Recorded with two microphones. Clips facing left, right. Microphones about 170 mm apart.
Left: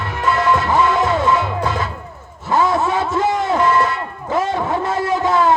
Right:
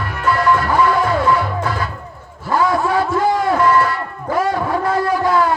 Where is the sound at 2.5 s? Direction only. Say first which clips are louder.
Even; 20° left (ahead or behind).